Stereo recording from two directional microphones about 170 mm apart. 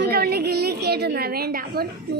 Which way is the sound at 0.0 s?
70° right (ahead or behind).